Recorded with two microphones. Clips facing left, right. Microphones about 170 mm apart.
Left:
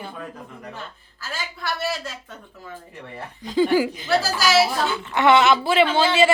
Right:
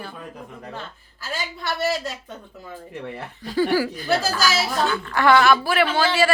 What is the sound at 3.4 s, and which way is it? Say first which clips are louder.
Speech: left 2 dB; 20° left (ahead or behind).